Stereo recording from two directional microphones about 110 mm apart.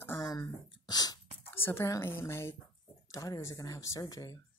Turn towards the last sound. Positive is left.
turn(degrees=30)  # may be behind; listen again after turning